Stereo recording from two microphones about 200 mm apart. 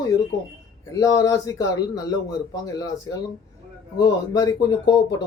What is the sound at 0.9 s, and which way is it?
Speech, 15° left (ahead or behind).